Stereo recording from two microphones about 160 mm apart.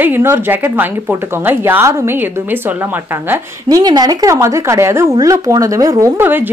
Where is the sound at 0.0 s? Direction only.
15° right (ahead or behind).